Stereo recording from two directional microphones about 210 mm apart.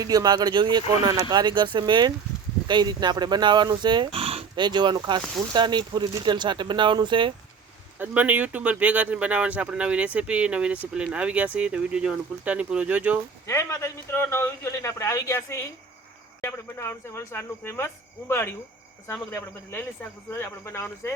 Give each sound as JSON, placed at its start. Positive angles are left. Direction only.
{"t": 0.0, "sound": "speech", "side_deg": -15}
{"t": 7.9, "sound": "speech", "side_deg": -10}
{"t": 13.5, "sound": "a man's voice", "side_deg": 15}